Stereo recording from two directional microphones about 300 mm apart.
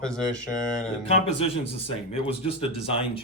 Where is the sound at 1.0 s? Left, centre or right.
Centre.